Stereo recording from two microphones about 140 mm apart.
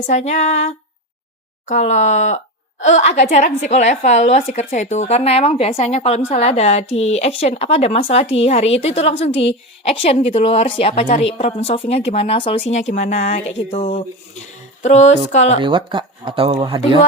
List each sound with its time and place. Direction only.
0.1 s a woman's voice: 55° left (ahead or behind)
15.6 s speech: 35° right (ahead or behind)